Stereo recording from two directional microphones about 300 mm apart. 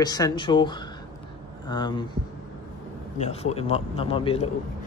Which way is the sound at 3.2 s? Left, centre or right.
Left.